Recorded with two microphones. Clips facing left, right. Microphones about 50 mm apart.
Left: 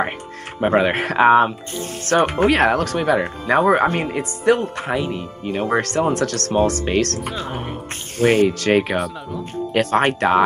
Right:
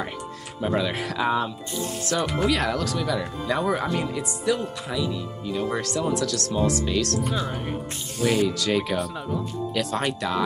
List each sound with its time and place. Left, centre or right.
0.6 s speech: left